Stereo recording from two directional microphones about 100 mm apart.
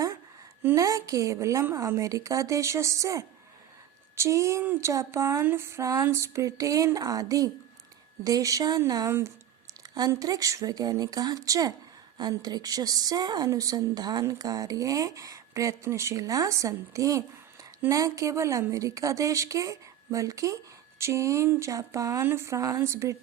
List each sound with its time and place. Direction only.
0.7 s a woman's voice: 35° right (ahead or behind)
10.1 s a woman's voice: 40° right (ahead or behind)